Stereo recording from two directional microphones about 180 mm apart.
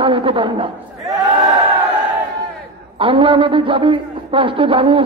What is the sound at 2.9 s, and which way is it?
A man's voice, 30° right (ahead or behind).